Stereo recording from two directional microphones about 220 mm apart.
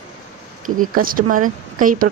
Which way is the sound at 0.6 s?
40° right (ahead or behind).